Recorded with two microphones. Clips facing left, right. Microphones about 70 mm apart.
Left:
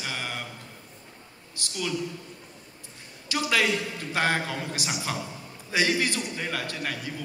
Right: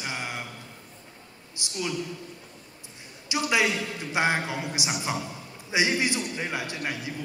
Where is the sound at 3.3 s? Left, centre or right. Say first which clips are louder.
Even; centre.